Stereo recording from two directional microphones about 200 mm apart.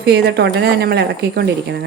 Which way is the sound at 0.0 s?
55° right (ahead or behind).